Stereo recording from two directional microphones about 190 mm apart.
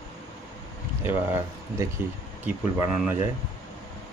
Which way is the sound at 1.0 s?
15° right (ahead or behind).